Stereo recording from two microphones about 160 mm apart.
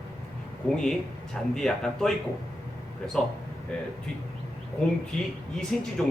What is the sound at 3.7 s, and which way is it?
Speech, 5° left (ahead or behind).